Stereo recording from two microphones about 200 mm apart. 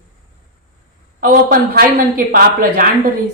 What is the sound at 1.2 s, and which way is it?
A woman's voice, 45° right (ahead or behind).